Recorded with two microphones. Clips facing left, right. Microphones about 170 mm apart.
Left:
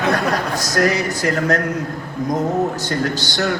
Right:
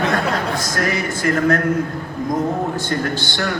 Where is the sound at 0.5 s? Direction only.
40° left (ahead or behind).